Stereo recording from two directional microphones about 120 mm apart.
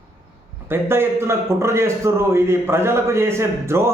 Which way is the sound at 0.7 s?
20° right (ahead or behind).